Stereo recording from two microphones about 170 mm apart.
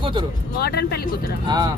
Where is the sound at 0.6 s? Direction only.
70° left (ahead or behind).